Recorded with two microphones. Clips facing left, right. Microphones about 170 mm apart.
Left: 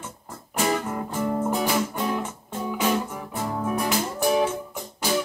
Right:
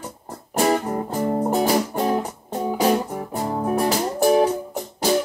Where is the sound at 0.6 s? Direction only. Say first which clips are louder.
Right 5 dB; 35° right (ahead or behind).